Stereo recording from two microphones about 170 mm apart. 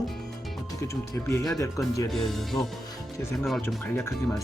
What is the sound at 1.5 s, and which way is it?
Speech, 20° left (ahead or behind).